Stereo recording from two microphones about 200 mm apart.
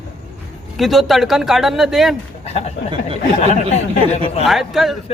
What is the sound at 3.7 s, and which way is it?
Speech, 35° left (ahead or behind).